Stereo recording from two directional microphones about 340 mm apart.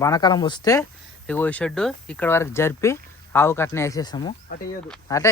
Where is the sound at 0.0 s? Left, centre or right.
Centre.